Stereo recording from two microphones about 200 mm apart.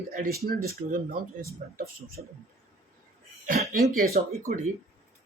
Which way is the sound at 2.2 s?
45° right (ahead or behind).